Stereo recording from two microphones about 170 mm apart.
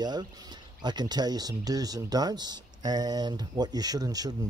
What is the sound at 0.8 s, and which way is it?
Speech, 25° right (ahead or behind).